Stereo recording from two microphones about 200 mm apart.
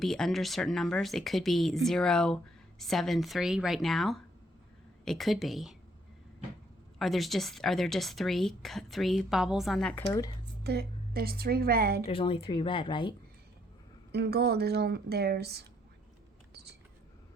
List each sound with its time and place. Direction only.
0.0 s speech: centre (ahead or behind)
7.0 s speech: centre (ahead or behind)
10.6 s a woman's voice: 55° right (ahead or behind)
12.0 s speech: 25° left (ahead or behind)
14.1 s a woman's voice: 50° right (ahead or behind)